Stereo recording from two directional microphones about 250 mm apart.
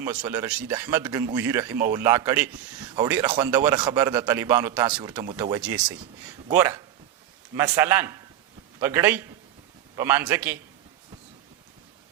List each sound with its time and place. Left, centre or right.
0.0 s a man's voice: centre